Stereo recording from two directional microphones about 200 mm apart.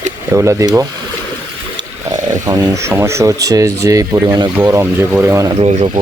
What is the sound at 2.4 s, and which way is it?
Speech, 20° right (ahead or behind).